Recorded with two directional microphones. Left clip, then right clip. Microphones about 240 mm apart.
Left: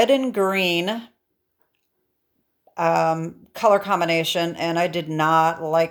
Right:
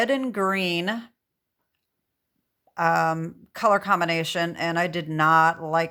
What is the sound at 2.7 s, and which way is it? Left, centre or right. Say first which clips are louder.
Speech: left 2 dB; centre.